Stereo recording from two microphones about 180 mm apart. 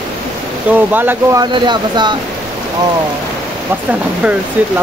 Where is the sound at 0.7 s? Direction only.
10° right (ahead or behind).